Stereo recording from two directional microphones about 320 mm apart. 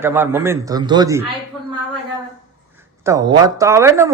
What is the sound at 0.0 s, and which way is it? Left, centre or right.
Speech, centre.